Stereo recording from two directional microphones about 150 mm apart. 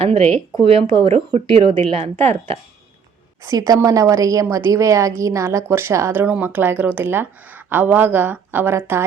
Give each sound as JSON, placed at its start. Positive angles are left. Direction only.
{"t": 0.0, "sound": "speech", "side_deg": -40}
{"t": 3.4, "sound": "a woman's voice", "side_deg": -25}